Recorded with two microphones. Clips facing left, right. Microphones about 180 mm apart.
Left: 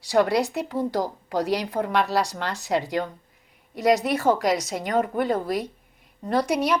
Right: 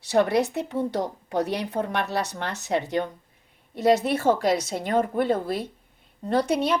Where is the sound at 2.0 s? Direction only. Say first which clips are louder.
Left 3 dB; 20° right (ahead or behind).